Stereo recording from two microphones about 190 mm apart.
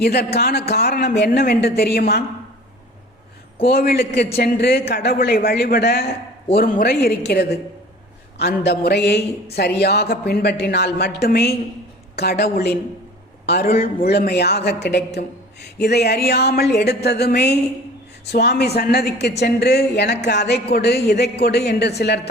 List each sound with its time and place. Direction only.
0.0 s speech: 60° left (ahead or behind)
3.7 s a man's voice: 55° left (ahead or behind)